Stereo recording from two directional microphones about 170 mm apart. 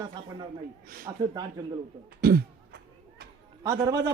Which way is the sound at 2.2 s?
70° right (ahead or behind).